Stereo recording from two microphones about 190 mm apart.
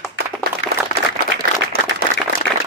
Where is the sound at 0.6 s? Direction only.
75° left (ahead or behind).